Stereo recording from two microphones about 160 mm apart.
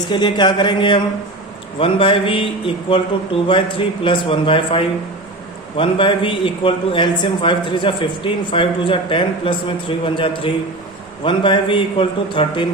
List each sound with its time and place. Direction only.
0.1 s a man's voice: 30° left (ahead or behind)